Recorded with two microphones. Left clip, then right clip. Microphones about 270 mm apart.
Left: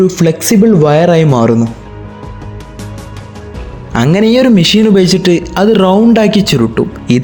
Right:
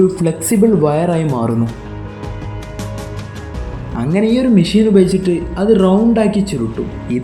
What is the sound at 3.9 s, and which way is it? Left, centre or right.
Speech, left.